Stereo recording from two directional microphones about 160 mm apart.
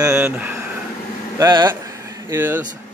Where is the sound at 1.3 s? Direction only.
25° right (ahead or behind).